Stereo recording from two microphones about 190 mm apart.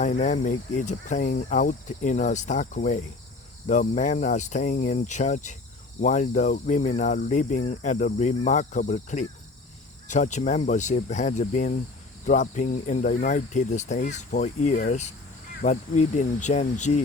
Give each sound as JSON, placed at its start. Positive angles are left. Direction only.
{"t": 0.0, "sound": "speech", "side_deg": 40}